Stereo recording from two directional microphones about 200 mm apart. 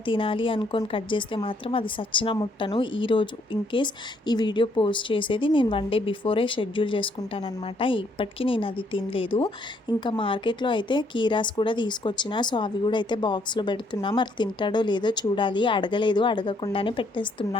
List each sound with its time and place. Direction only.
0.0 s a woman's voice: 25° left (ahead or behind)